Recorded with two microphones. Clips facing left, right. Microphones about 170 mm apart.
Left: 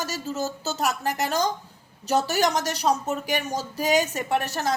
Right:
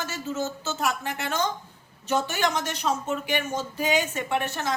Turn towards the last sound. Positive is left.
turn(degrees=40)  # may be behind; listen again after turning